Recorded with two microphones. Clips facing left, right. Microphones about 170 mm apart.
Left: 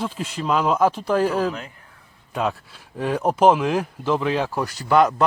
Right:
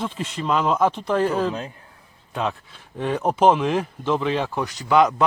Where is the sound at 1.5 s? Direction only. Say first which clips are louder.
Right 1 dB; 25° right (ahead or behind).